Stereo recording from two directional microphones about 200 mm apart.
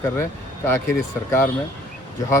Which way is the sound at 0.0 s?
10° left (ahead or behind).